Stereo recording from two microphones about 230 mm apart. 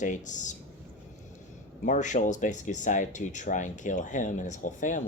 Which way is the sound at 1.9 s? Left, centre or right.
Left.